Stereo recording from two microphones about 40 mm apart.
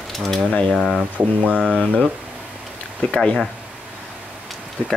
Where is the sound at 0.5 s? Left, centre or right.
Left.